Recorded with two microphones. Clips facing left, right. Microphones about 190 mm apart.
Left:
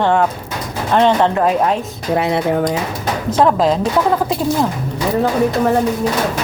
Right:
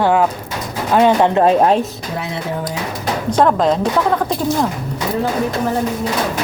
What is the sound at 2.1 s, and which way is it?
Speech, 70° left (ahead or behind).